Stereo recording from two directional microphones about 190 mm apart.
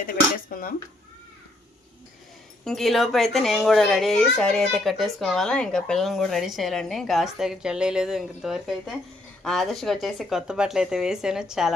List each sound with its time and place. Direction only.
0.0 s speech: 50° left (ahead or behind)
2.6 s a child's voice: centre (ahead or behind)